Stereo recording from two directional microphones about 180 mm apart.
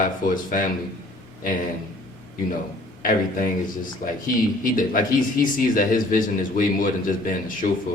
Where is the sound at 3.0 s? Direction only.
50° left (ahead or behind).